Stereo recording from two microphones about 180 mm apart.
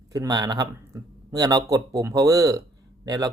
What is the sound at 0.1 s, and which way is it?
Speech, 20° right (ahead or behind).